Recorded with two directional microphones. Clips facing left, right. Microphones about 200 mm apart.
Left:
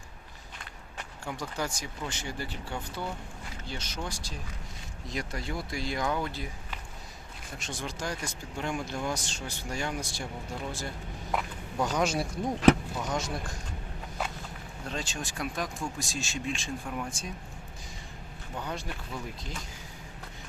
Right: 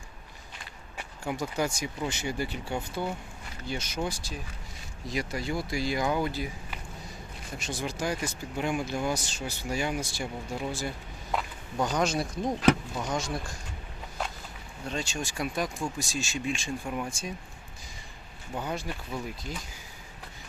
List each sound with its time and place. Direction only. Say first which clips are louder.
0.9 s speech: right 5 dB; 10° right (ahead or behind)
14.8 s speech: right 3 dB; centre (ahead or behind)
18.6 s speech: right 3 dB; 5° right (ahead or behind)